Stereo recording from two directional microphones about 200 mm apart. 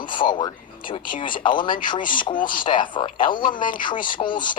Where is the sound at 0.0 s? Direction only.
25° left (ahead or behind).